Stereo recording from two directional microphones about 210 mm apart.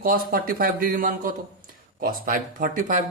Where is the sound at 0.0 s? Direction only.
45° right (ahead or behind).